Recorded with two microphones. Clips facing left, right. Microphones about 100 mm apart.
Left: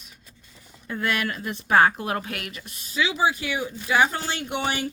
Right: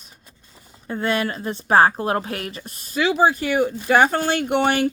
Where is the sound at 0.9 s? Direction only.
30° right (ahead or behind).